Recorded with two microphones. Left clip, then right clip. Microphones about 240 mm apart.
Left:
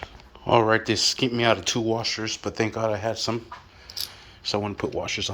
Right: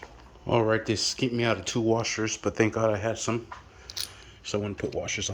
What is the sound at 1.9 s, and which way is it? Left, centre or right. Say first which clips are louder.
Speech: even; right.